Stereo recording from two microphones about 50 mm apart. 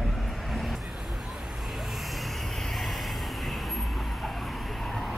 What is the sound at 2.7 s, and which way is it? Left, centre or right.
Vehicle, centre.